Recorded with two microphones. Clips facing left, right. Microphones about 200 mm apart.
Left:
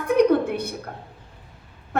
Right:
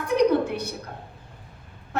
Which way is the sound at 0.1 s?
55° left (ahead or behind).